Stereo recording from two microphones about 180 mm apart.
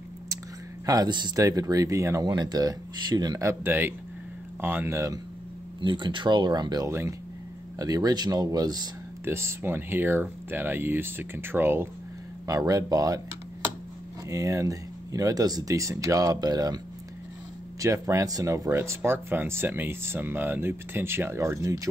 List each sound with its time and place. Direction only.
0.8 s speech: 20° right (ahead or behind)
14.3 s speech: 15° right (ahead or behind)